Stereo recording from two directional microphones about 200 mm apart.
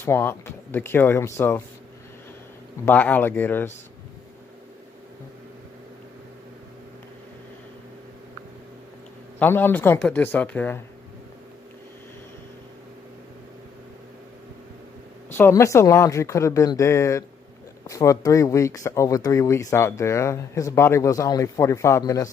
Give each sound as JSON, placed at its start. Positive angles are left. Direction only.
{"t": 0.0, "sound": "speech", "side_deg": 10}
{"t": 2.8, "sound": "speech", "side_deg": 10}
{"t": 9.4, "sound": "speech", "side_deg": 10}
{"t": 15.3, "sound": "speech", "side_deg": 10}